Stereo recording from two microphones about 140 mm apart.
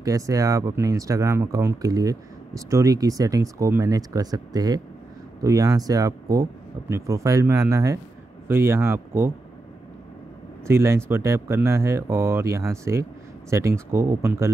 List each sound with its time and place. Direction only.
0.0 s speech: 25° right (ahead or behind)
10.7 s speech: 20° right (ahead or behind)